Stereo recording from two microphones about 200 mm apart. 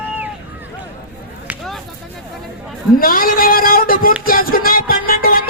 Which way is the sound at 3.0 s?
45° left (ahead or behind).